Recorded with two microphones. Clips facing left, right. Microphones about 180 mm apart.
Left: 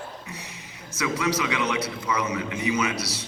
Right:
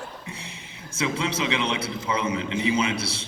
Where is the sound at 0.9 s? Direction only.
30° right (ahead or behind).